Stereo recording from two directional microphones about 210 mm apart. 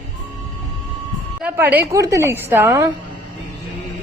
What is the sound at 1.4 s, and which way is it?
A child's voice, 10° right (ahead or behind).